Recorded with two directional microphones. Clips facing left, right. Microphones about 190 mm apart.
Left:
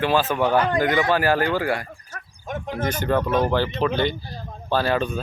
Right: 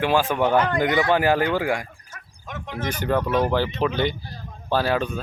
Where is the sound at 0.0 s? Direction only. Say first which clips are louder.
Even; 15° right (ahead or behind).